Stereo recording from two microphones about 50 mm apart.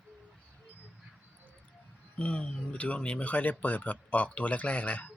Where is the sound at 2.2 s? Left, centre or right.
Left.